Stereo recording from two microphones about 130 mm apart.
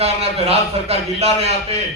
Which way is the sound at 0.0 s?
55° right (ahead or behind).